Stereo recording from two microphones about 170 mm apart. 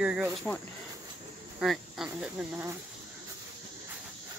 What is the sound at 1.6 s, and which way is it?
Speech, centre (ahead or behind).